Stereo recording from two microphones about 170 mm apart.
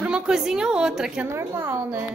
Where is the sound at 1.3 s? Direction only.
15° right (ahead or behind).